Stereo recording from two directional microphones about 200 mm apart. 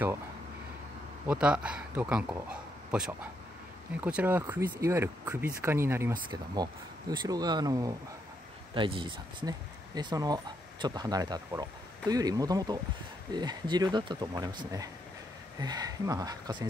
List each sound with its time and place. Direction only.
1.2 s speech: 5° right (ahead or behind)